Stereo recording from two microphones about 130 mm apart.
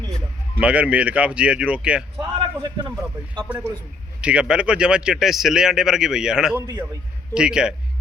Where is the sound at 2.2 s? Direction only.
35° right (ahead or behind).